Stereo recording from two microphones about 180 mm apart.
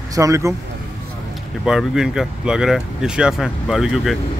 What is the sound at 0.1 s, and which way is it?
Speech, 15° right (ahead or behind).